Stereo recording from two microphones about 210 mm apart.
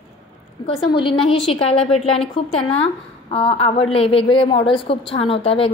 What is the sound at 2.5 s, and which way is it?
A woman's voice, 25° left (ahead or behind).